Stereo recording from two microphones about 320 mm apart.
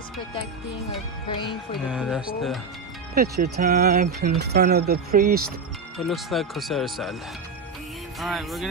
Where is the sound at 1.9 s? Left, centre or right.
Centre.